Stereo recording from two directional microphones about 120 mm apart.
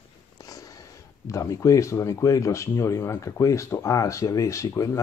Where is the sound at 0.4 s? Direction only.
30° left (ahead or behind).